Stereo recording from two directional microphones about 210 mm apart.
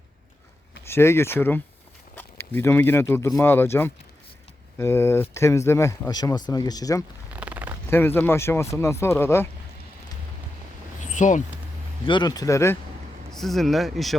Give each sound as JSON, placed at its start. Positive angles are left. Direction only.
{"t": 0.9, "sound": "speech", "side_deg": 10}
{"t": 7.3, "sound": "a sound", "side_deg": -5}
{"t": 7.9, "sound": "speech", "side_deg": 10}
{"t": 11.0, "sound": "a sound", "side_deg": 35}
{"t": 12.0, "sound": "speech", "side_deg": 20}
{"t": 13.3, "sound": "speech", "side_deg": 0}